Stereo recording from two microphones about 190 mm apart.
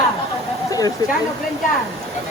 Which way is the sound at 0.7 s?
20° left (ahead or behind).